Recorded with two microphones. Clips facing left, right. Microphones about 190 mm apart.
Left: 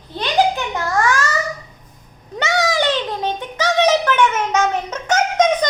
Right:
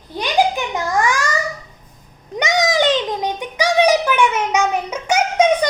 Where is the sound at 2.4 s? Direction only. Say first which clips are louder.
Right 2 dB; 15° right (ahead or behind).